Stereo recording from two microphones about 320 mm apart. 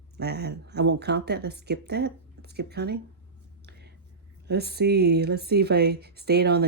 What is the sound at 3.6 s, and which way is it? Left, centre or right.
Whispering, right.